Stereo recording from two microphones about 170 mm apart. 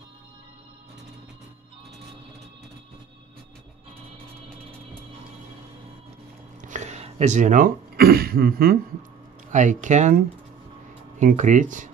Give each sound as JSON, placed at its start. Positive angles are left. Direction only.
{"t": 6.6, "sound": "speech", "side_deg": -45}
{"t": 9.5, "sound": "speech", "side_deg": -45}